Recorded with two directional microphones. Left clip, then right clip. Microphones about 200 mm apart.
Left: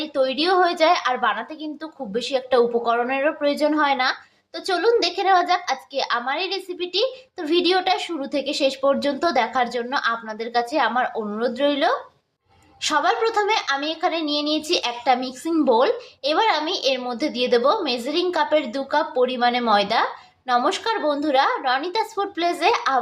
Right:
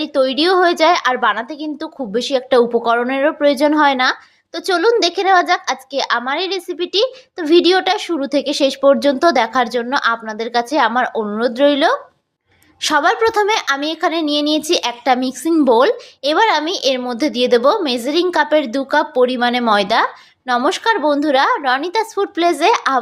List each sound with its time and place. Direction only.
0.0 s a woman's voice: 40° right (ahead or behind)